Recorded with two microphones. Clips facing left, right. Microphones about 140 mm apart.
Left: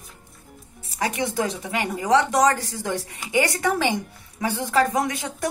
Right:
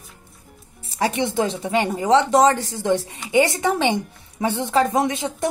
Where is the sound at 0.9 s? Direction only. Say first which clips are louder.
Right 4 dB; 30° right (ahead or behind).